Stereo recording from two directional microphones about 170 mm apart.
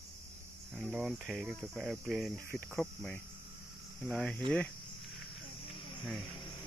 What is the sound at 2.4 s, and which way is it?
Cricket, 10° left (ahead or behind).